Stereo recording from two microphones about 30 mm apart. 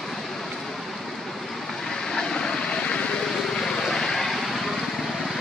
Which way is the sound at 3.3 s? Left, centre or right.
Centre.